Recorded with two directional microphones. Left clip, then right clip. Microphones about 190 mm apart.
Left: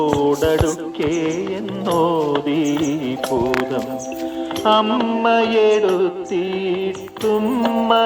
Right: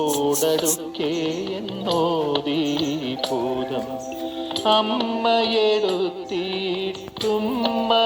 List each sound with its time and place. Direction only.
0.0 s music: 15° left (ahead or behind)